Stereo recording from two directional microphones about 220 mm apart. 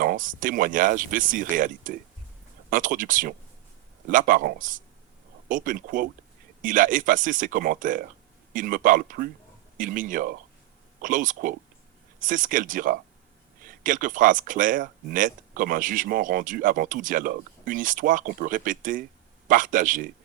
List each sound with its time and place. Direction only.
0.0 s speech: 40° right (ahead or behind)